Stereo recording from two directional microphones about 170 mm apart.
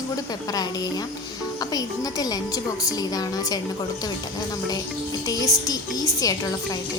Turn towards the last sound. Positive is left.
turn(degrees=20)  # may be behind; listen again after turning